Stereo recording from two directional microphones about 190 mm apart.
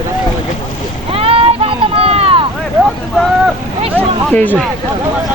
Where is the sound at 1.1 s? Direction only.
30° right (ahead or behind).